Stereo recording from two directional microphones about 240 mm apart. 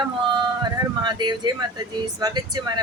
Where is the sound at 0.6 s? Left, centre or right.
Centre.